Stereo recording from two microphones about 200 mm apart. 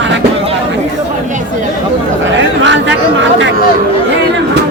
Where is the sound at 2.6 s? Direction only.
65° right (ahead or behind).